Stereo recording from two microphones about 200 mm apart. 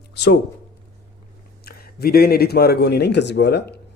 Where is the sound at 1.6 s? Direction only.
50° left (ahead or behind).